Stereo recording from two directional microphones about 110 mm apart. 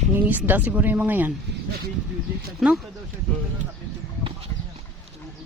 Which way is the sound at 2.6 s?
5° right (ahead or behind).